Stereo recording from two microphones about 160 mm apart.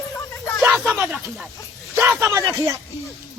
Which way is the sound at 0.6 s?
10° right (ahead or behind).